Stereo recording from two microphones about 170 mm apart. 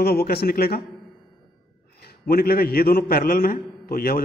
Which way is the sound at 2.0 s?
65° left (ahead or behind).